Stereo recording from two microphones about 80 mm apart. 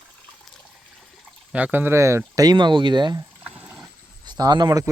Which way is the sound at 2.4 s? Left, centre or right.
Right.